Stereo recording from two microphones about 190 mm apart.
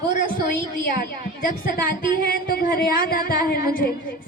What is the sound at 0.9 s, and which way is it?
A woman's voice, 50° left (ahead or behind).